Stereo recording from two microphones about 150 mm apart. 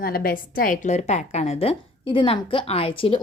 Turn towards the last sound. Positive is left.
turn(degrees=40)  # may be behind; listen again after turning